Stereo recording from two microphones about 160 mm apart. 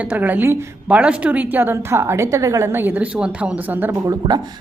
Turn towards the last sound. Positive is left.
turn(degrees=-15)  # may be behind; listen again after turning